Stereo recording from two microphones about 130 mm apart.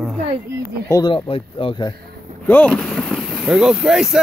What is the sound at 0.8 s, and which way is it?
Speech, 25° left (ahead or behind).